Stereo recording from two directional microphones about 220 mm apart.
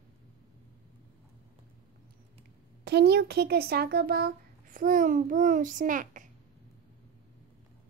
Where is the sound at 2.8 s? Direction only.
50° right (ahead or behind).